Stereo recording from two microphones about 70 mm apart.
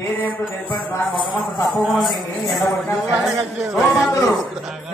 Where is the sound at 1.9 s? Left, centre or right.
Centre.